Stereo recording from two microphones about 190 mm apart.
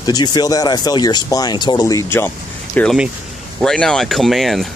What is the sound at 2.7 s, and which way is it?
Speech, centre (ahead or behind).